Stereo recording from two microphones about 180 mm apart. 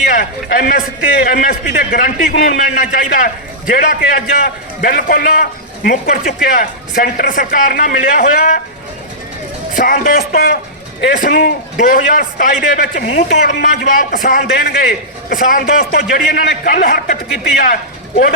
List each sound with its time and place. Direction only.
0.1 s a man's voice: 55° left (ahead or behind)
9.7 s a man's voice: 50° left (ahead or behind)